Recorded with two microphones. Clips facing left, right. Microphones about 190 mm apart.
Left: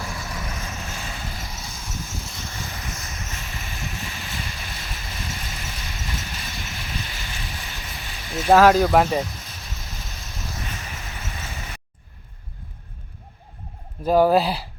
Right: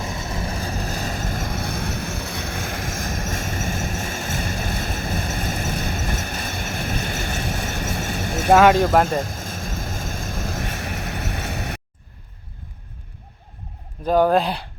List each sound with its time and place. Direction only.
0.0 s vehicle: 25° right (ahead or behind); by 8.4 s 60° right (ahead or behind)
8.5 s speech: centre (ahead or behind)
9.2 s vehicle: 50° right (ahead or behind); by 11.8 s 65° right (ahead or behind)
14.0 s speech: 5° left (ahead or behind)